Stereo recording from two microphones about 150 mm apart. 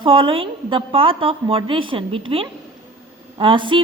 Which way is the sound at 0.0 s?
35° right (ahead or behind).